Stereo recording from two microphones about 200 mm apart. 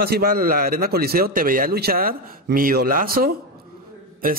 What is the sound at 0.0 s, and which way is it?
A man's voice, 50° right (ahead or behind).